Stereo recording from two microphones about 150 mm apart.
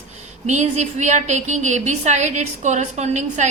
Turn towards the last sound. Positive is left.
turn(degrees=-50)  # may be behind; listen again after turning